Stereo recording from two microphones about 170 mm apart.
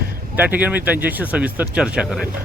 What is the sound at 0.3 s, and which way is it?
Speech, 10° right (ahead or behind).